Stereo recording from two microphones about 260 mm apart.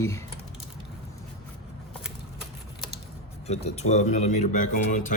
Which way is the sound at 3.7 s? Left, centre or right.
Left.